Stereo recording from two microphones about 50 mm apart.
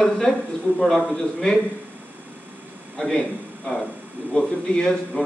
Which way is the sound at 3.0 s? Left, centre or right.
Centre.